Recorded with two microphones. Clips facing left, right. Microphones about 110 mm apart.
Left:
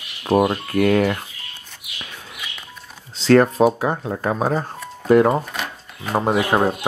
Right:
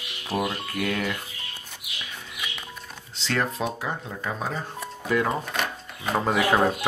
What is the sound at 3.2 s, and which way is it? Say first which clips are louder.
Speech: left 13 dB; 45° left (ahead or behind).